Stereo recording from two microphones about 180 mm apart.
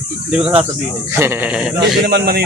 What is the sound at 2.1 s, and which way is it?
Speech, 65° right (ahead or behind).